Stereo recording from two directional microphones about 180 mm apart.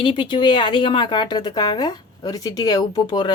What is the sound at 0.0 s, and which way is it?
Speech, 25° left (ahead or behind).